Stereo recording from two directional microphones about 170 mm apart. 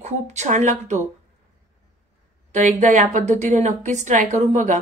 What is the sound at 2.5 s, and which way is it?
A woman's voice, 45° right (ahead or behind).